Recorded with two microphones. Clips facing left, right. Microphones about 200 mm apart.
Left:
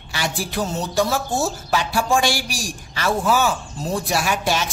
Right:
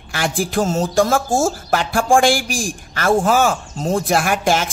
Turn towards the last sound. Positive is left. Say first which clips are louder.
# right 4 dB
turn(degrees=-50)  # may be behind; listen again after turning